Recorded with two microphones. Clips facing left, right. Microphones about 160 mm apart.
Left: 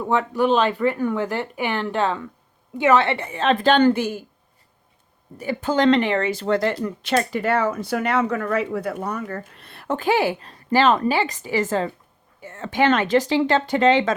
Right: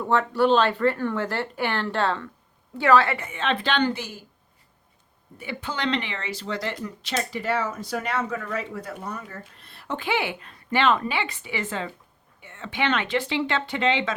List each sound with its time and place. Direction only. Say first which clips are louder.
0.0 s a woman's voice: left 1 dB; 15° left (ahead or behind); by 4.2 s 55° left (ahead or behind)
5.4 s speech: left 10 dB; 40° left (ahead or behind)